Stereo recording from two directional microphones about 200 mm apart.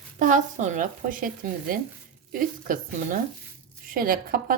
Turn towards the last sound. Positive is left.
turn(degrees=-45)  # may be behind; listen again after turning